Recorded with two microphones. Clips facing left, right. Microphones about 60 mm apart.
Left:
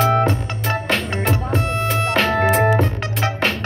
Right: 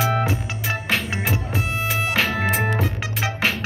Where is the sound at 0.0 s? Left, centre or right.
Centre.